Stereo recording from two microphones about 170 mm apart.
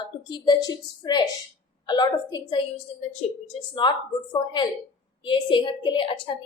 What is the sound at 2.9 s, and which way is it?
A woman's voice, 35° left (ahead or behind).